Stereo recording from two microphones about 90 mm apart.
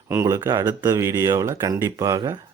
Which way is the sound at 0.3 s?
35° right (ahead or behind).